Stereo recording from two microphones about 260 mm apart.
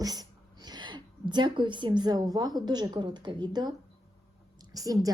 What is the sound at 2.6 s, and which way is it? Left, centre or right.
A woman's voice, centre.